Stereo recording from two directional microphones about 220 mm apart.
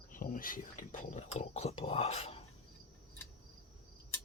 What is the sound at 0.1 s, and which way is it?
Speech, 40° left (ahead or behind).